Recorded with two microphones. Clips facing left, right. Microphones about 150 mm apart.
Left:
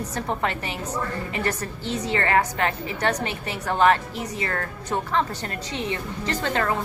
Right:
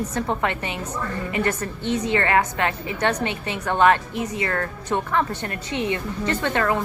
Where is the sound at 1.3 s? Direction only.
30° left (ahead or behind).